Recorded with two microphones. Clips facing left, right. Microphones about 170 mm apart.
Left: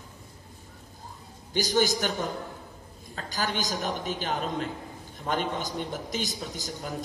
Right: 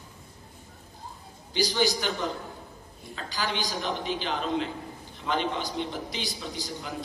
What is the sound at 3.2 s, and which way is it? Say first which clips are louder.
A man's voice: left 1 dB; 45° left (ahead or behind).